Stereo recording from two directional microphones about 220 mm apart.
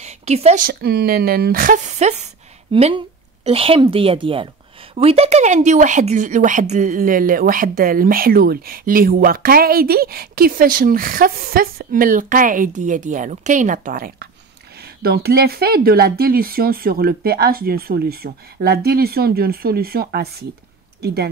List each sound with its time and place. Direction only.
0.0 s speech: 30° right (ahead or behind); by 21.3 s 45° right (ahead or behind)